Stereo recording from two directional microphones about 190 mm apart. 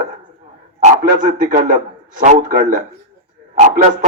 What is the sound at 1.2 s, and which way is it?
A man's voice, 40° right (ahead or behind).